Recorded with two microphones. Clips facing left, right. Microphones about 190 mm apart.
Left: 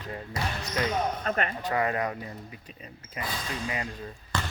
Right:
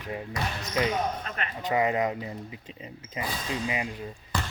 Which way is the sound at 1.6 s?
15° right (ahead or behind).